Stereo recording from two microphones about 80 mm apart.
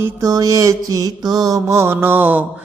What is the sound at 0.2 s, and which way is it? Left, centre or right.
Mantra, right.